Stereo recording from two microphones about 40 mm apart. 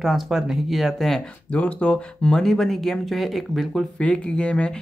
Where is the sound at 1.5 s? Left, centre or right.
Left.